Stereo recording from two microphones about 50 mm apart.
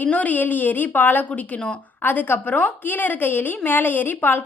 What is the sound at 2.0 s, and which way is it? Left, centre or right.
A woman's voice, left.